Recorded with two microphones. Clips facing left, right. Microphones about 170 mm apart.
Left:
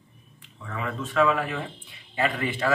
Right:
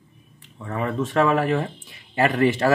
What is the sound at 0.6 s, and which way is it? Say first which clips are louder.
Speech: right 7 dB; 40° right (ahead or behind).